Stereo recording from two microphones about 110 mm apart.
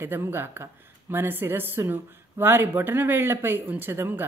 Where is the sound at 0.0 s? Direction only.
20° right (ahead or behind).